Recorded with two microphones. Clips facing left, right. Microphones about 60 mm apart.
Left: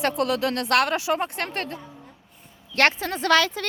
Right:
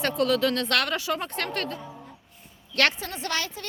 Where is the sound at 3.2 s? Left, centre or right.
Left.